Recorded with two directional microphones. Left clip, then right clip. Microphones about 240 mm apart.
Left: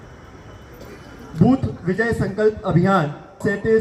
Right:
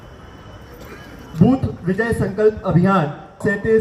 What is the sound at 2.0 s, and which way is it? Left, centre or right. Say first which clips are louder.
A man's voice: right 2 dB; right.